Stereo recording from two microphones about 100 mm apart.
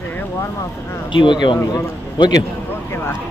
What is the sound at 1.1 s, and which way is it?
A man's voice, 50° left (ahead or behind).